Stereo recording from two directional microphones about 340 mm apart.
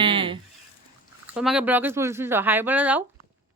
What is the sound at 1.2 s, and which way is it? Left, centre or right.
Speech, centre.